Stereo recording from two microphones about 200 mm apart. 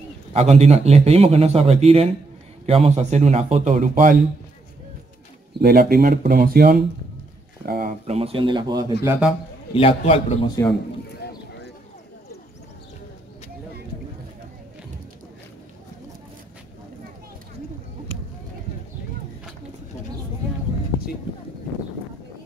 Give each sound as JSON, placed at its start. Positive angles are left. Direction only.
{"t": 0.3, "sound": "a man's voice", "side_deg": -30}
{"t": 5.6, "sound": "speech", "side_deg": -50}
{"t": 7.6, "sound": "a sound", "side_deg": -50}
{"t": 8.1, "sound": "speech", "side_deg": -30}
{"t": 9.0, "sound": "a man's voice", "side_deg": -10}
{"t": 9.8, "sound": "a man's voice", "side_deg": 30}
{"t": 11.2, "sound": "clip-clop", "side_deg": 55}